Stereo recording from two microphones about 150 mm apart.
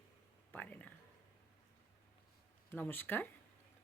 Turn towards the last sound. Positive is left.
turn(degrees=10)  # may be behind; listen again after turning